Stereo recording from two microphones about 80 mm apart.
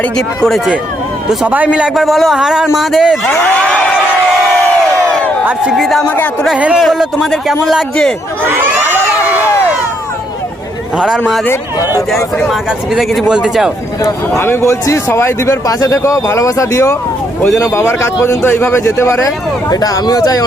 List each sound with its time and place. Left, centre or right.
0.2 s speech: centre
1.5 s a man's voice: centre
2.0 s speech: centre
3.2 s speech: centre
5.7 s speech: centre
8.4 s crowd: right
10.9 s speech: centre
14.0 s speech: left
19.7 s speech: left